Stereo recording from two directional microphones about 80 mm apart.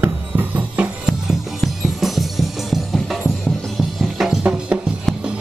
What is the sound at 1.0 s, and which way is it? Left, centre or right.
Music, centre.